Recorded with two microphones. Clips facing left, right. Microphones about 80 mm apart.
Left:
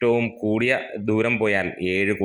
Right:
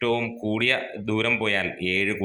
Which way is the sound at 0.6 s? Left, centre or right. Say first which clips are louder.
Left 4 dB; left.